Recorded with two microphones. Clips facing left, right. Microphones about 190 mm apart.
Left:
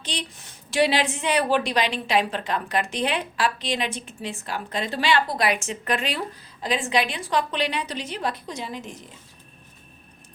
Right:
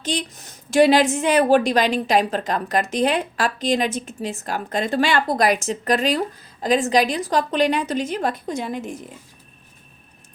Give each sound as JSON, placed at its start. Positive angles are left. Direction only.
{"t": 0.0, "sound": "a woman's voice", "side_deg": -45}